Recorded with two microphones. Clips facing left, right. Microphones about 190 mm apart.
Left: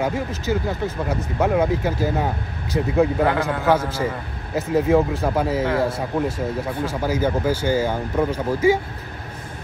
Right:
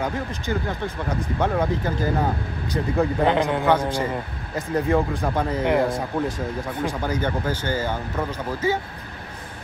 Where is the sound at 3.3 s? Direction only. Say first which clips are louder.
Right 1 dB; 20° right (ahead or behind).